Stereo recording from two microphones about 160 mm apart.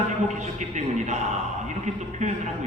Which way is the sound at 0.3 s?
50° right (ahead or behind).